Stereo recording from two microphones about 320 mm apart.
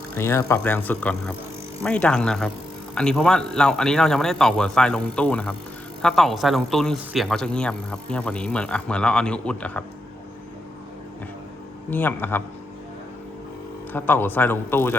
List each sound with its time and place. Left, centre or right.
0.2 s speech: centre
11.9 s a man's voice: centre
13.9 s a man's voice: centre